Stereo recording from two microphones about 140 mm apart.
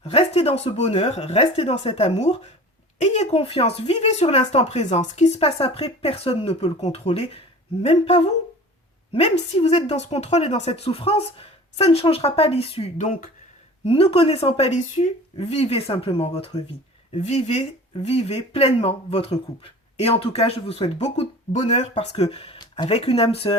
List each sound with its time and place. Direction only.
0.0 s speech: 45° left (ahead or behind)
13.1 s speech: 70° left (ahead or behind)
13.8 s speech: 40° left (ahead or behind)